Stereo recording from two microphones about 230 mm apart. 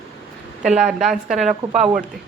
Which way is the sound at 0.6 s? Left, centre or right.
Centre.